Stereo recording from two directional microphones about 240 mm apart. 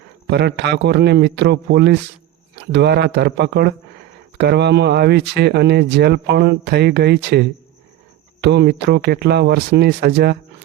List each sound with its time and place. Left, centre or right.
0.3 s speech: right